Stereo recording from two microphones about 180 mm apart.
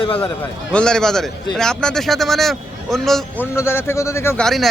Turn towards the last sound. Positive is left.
turn(degrees=0)  # may be behind; listen again after turning